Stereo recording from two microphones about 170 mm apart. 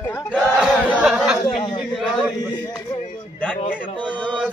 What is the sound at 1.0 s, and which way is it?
Chatter, centre (ahead or behind).